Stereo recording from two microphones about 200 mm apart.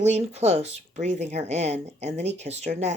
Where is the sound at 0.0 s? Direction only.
35° right (ahead or behind).